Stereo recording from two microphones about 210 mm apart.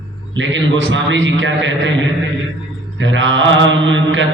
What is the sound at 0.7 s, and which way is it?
Mantra, 60° right (ahead or behind).